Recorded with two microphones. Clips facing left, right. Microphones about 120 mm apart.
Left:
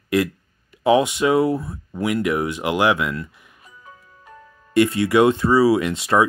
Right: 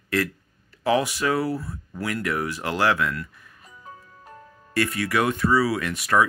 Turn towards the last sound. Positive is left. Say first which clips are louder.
# left 4 dB
turn(degrees=25)  # may be behind; listen again after turning